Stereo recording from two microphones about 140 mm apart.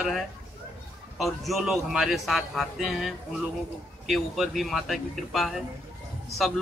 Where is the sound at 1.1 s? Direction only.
Centre (ahead or behind).